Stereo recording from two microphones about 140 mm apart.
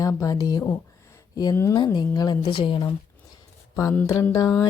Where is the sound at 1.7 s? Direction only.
30° left (ahead or behind).